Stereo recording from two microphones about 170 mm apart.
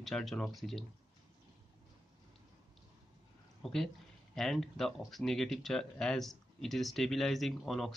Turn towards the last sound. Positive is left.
turn(degrees=0)  # may be behind; listen again after turning